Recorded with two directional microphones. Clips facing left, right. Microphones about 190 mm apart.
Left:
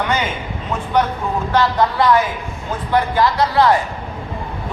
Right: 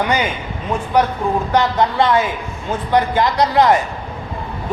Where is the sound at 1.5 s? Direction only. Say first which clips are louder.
Even; 25° right (ahead or behind).